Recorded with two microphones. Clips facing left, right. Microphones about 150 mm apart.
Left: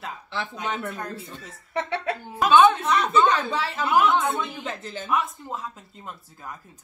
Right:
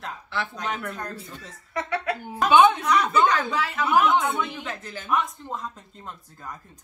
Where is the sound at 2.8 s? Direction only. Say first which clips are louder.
Even; 25° left (ahead or behind).